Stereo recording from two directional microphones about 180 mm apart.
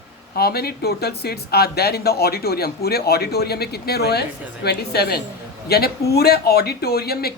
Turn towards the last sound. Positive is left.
turn(degrees=60)  # may be behind; listen again after turning